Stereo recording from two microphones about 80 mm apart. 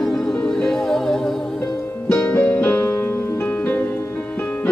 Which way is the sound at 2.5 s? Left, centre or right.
Left.